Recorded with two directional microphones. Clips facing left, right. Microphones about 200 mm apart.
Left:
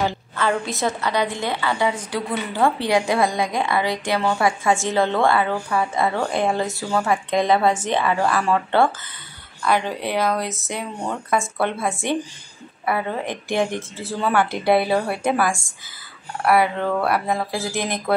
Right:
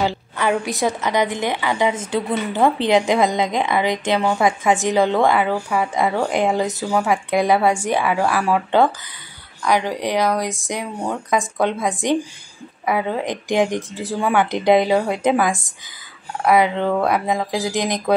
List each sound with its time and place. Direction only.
0.0 s a woman's voice: 15° right (ahead or behind)